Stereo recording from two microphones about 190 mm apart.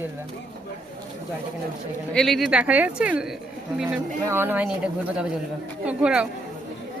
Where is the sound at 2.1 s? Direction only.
Centre (ahead or behind).